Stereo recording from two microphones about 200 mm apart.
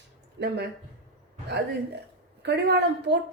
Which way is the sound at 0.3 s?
55° right (ahead or behind).